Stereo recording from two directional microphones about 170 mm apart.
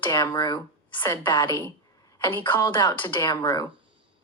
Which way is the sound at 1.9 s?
20° left (ahead or behind).